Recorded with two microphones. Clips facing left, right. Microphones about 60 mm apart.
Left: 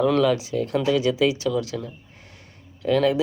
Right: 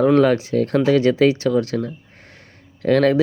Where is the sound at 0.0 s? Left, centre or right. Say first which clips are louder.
Right 5 dB; right.